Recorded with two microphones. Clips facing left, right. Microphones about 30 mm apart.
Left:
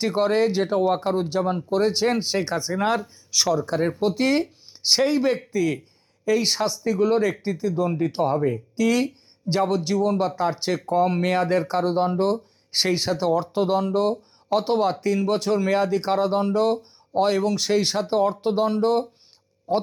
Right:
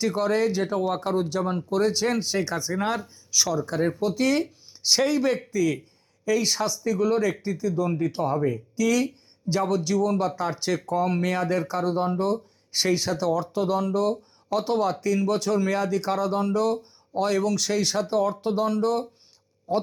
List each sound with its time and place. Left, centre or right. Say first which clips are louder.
0.0 s speech: left 3 dB; left
0.8 s speech: left 3 dB; left
2.7 s speech: left 4 dB; left
3.3 s speech: left 3 dB; left
3.8 s speech: left 1 dB; centre
4.0 s speech: left 3 dB; left